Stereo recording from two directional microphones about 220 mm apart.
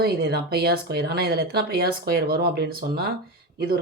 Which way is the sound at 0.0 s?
45° right (ahead or behind).